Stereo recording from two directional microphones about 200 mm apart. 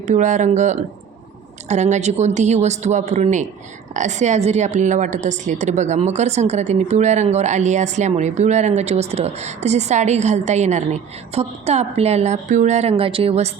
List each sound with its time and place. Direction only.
0.1 s a woman's voice: 35° right (ahead or behind)